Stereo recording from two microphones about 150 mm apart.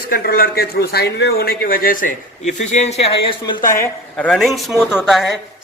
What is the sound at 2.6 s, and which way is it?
Speech, 45° left (ahead or behind).